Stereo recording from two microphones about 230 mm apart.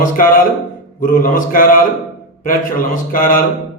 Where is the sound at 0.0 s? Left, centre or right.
Left.